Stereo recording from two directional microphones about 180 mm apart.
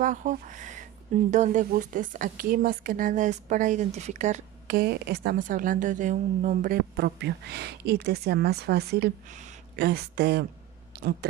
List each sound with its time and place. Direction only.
0.0 s a woman's voice: 45° right (ahead or behind)
4.7 s a woman's voice: 65° right (ahead or behind); by 6.8 s 45° right (ahead or behind)
7.0 s speech: 65° right (ahead or behind)